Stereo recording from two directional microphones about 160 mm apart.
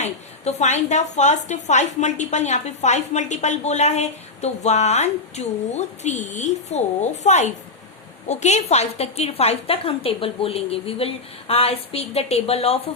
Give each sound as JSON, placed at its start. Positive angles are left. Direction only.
{"t": 0.0, "sound": "a woman's voice", "side_deg": 45}